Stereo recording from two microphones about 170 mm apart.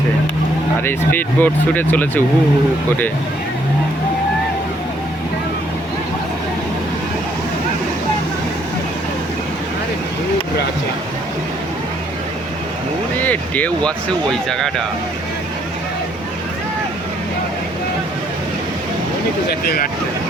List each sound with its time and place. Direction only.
0.9 s speech: 10° left (ahead or behind)
13.1 s speech: 10° left (ahead or behind)
19.5 s speech: 60° left (ahead or behind)